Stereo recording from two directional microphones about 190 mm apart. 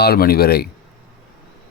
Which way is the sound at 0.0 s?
55° left (ahead or behind).